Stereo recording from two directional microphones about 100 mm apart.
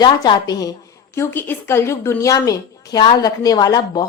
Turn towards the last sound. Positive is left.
turn(degrees=40)  # may be behind; listen again after turning